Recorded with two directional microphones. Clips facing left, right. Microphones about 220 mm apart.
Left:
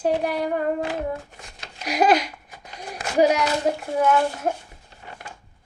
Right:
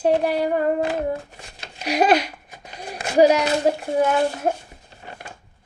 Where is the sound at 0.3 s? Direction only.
30° right (ahead or behind).